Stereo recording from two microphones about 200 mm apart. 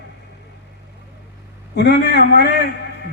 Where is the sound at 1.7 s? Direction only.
55° left (ahead or behind).